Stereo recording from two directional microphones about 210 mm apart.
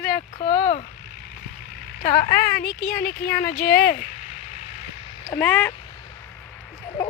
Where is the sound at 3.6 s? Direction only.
45° left (ahead or behind).